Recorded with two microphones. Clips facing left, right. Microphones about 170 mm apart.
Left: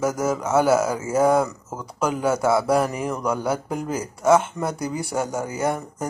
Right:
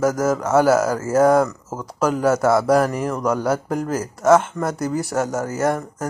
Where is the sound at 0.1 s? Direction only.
10° left (ahead or behind).